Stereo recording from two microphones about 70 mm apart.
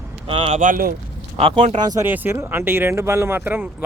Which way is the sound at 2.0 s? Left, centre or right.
Right.